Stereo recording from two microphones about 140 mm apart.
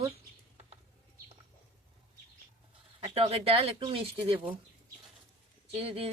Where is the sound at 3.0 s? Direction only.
45° right (ahead or behind).